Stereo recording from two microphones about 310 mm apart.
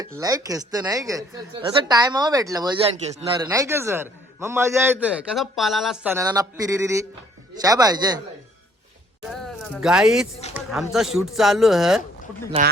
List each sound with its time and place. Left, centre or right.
0.0 s a woman's voice: centre
9.8 s speech: centre
12.6 s speech: right